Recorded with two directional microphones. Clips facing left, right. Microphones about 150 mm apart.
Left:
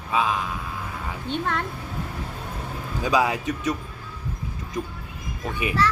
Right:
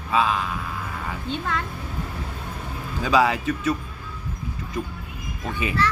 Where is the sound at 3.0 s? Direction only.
15° left (ahead or behind).